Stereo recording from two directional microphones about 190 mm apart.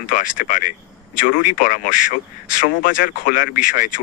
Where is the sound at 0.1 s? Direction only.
45° left (ahead or behind).